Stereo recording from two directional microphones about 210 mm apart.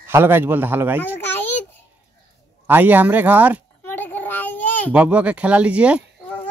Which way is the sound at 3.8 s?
10° left (ahead or behind).